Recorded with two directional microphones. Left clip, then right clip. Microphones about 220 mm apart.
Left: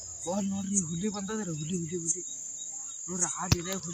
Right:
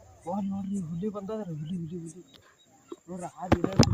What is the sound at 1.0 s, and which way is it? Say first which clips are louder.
Cricket: right 1 dB; 20° right (ahead or behind).